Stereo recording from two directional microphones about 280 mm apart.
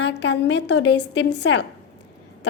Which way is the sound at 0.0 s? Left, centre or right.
Left.